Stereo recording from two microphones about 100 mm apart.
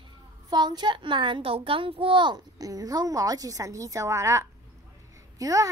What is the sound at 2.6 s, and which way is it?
A woman's voice, 35° right (ahead or behind).